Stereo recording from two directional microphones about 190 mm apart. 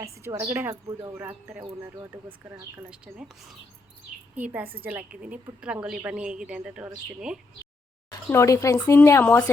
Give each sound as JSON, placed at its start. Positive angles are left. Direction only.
{"t": 0.0, "sound": "a woman's voice", "side_deg": -15}
{"t": 4.4, "sound": "a woman's voice", "side_deg": -10}
{"t": 8.3, "sound": "a woman's voice", "side_deg": 15}